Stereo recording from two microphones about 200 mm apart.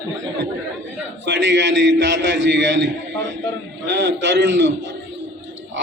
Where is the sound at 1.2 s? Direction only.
60° right (ahead or behind).